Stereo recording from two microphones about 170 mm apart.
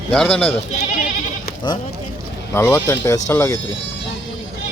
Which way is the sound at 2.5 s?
15° left (ahead or behind).